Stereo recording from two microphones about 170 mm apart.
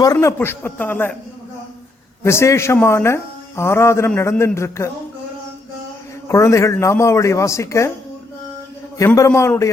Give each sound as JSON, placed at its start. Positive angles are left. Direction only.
{"t": 0.0, "sound": "a man's voice", "side_deg": 20}
{"t": 2.2, "sound": "a man's voice", "side_deg": 15}
{"t": 6.2, "sound": "a man's voice", "side_deg": 15}
{"t": 9.0, "sound": "a man's voice", "side_deg": 15}